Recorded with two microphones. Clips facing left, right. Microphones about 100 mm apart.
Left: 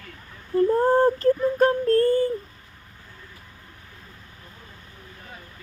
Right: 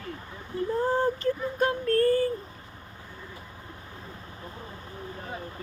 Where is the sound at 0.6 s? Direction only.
45° left (ahead or behind); by 2.3 s 30° left (ahead or behind).